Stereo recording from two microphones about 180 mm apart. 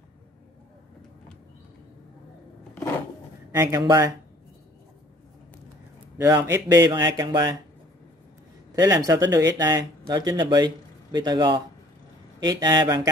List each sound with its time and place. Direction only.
3.5 s speech: 15° right (ahead or behind)
6.4 s speech: 15° right (ahead or behind)
8.7 s speech: 20° right (ahead or behind)